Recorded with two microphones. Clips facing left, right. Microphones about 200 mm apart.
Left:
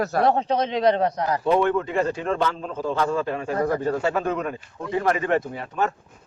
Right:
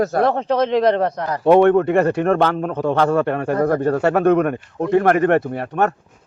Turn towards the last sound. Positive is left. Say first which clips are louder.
# right 6 dB
turn(degrees=-65)  # may be behind; listen again after turning